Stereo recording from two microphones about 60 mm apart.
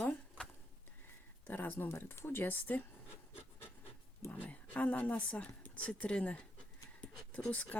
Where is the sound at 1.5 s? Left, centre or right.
Left.